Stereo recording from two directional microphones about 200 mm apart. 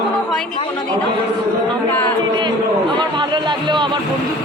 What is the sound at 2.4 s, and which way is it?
A man's voice, 25° right (ahead or behind).